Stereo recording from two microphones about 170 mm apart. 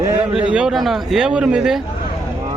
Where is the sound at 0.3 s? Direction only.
5° right (ahead or behind).